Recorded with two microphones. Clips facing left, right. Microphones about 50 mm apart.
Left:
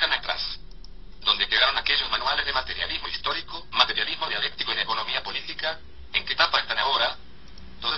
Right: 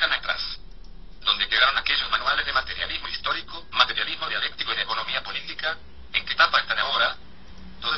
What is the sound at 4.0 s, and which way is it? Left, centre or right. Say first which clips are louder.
Speech: even; centre.